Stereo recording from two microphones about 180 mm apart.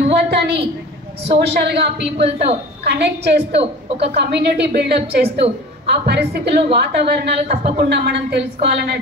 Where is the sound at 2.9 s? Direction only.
65° right (ahead or behind).